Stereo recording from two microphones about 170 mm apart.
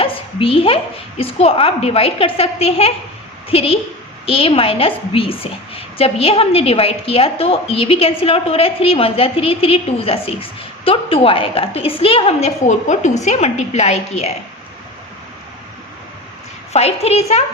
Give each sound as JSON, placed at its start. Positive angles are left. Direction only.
{"t": 0.0, "sound": "a sound", "side_deg": 30}
{"t": 1.2, "sound": "a woman's voice", "side_deg": 35}
{"t": 16.7, "sound": "a woman's voice", "side_deg": 40}